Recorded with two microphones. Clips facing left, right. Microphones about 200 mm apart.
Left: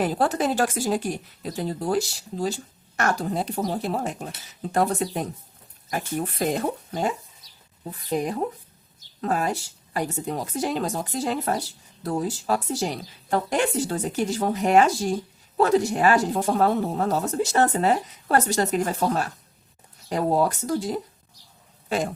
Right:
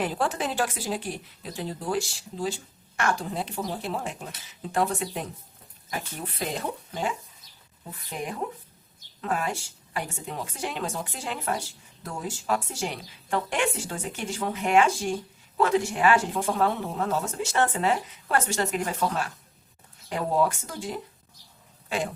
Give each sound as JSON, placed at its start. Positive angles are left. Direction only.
{"t": 0.0, "sound": "speech", "side_deg": 40}
{"t": 7.9, "sound": "speech", "side_deg": 40}